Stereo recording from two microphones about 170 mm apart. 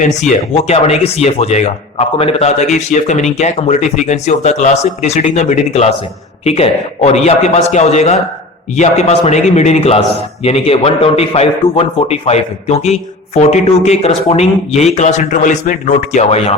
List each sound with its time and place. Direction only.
0.0 s a man's voice: 45° left (ahead or behind)